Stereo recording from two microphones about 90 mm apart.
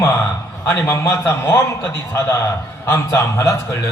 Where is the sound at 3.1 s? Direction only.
35° left (ahead or behind).